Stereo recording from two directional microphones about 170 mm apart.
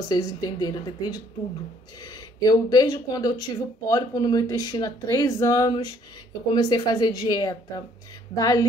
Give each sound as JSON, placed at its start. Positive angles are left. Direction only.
{"t": 0.1, "sound": "speech", "side_deg": 20}